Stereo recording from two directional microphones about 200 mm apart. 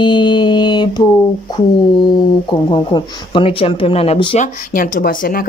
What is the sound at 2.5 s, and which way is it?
Female singing, 25° left (ahead or behind).